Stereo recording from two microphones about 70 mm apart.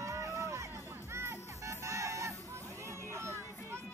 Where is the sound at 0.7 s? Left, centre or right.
Right.